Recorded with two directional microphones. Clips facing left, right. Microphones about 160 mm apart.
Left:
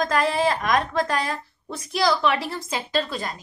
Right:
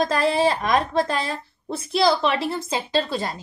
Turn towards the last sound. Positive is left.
turn(degrees=-30)  # may be behind; listen again after turning